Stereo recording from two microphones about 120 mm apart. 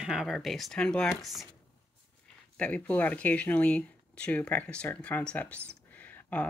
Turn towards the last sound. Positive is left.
turn(degrees=15)  # may be behind; listen again after turning